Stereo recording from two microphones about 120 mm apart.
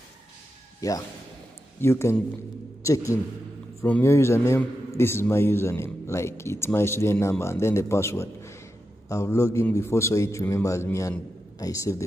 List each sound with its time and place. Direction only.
0.7 s a man's voice: 30° left (ahead or behind)